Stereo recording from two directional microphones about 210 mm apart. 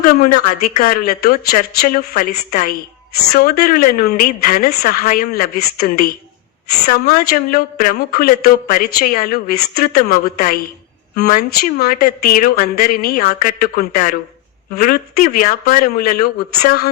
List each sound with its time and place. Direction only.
0.0 s a woman's voice: 45° left (ahead or behind)